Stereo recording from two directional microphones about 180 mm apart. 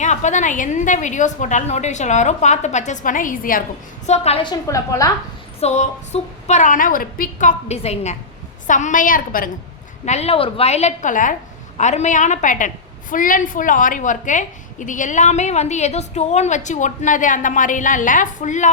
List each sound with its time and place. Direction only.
0.0 s a woman's voice: 40° left (ahead or behind)
4.0 s a woman's voice: 40° left (ahead or behind); by 5.1 s 20° left (ahead or behind)
5.5 s a woman's voice: 40° left (ahead or behind)
10.1 s a woman's voice: 35° left (ahead or behind)